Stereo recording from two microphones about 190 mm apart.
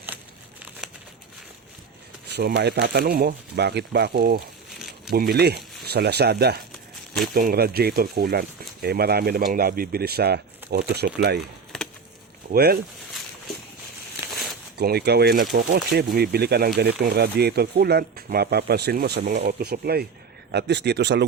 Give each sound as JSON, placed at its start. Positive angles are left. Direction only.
{"t": 2.3, "sound": "speech", "side_deg": -60}
{"t": 4.8, "sound": "a sound", "side_deg": 0}
{"t": 5.1, "sound": "speech", "side_deg": -55}
{"t": 12.5, "sound": "speech", "side_deg": -55}
{"t": 14.2, "sound": "a sound", "side_deg": -15}
{"t": 14.8, "sound": "speech", "side_deg": -60}